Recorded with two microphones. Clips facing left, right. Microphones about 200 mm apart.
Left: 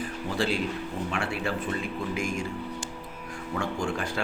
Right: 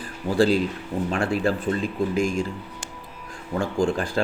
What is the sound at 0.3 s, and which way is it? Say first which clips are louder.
A man's voice: right 8 dB; 40° right (ahead or behind).